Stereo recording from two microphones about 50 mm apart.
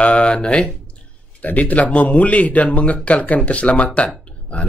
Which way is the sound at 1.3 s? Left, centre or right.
Left.